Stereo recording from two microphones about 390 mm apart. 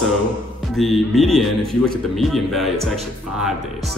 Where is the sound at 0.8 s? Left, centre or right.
Centre.